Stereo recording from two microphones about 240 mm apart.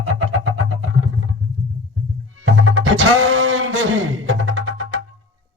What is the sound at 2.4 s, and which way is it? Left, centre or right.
Music, right.